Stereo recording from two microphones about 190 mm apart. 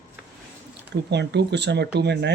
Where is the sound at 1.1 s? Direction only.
65° right (ahead or behind).